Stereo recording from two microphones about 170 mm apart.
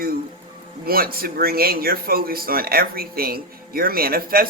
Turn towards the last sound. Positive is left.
turn(degrees=-60)  # may be behind; listen again after turning